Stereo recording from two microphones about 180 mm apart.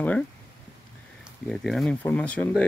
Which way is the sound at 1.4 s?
Centre (ahead or behind).